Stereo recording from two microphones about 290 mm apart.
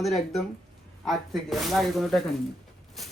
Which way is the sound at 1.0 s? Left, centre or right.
Centre.